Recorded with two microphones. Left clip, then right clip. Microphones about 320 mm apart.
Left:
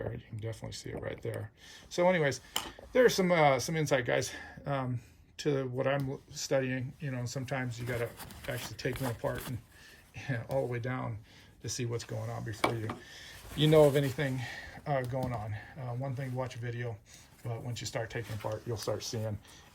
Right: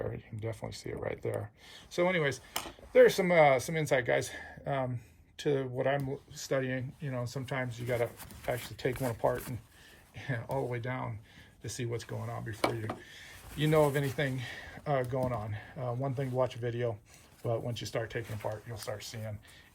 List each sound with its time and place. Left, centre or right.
0.1 s speech: centre